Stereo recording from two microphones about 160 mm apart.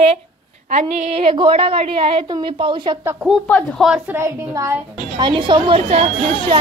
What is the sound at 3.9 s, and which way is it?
Speech, 15° right (ahead or behind).